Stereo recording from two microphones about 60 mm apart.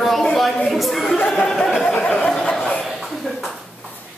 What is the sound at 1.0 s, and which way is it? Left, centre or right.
Speech, centre.